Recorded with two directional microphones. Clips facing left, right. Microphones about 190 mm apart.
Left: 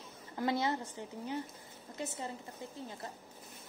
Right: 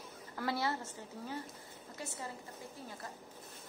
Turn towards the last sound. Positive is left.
turn(degrees=20)  # may be behind; listen again after turning